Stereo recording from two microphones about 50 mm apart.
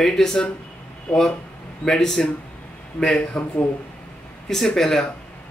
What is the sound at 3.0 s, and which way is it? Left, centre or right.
A man's voice, left.